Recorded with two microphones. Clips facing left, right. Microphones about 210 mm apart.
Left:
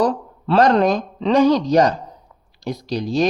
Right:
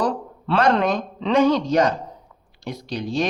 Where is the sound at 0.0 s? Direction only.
40° left (ahead or behind).